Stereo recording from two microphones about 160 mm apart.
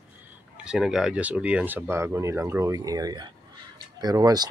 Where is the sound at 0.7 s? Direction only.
5° right (ahead or behind).